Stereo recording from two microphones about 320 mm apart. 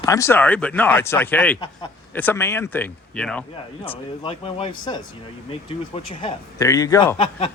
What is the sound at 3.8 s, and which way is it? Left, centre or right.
Speech, centre.